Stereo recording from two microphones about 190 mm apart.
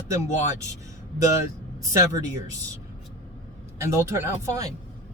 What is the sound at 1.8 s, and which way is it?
Speech, 15° right (ahead or behind).